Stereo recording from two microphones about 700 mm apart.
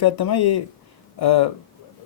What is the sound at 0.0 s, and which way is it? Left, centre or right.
Speech, left.